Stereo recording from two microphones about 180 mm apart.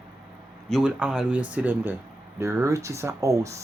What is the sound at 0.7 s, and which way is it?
Speech, 5° right (ahead or behind).